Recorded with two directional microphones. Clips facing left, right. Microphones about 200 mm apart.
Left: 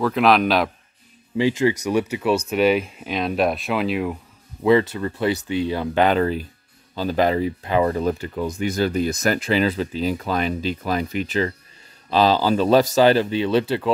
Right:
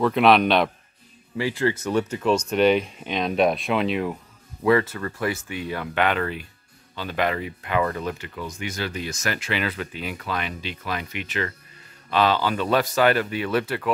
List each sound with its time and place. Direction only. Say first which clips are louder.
0.0 s speech: even; centre (ahead or behind)
1.3 s speech: left 5 dB; 20° left (ahead or behind); by 4.2 s centre (ahead or behind)
4.6 s speech: left 3 dB; 20° left (ahead or behind)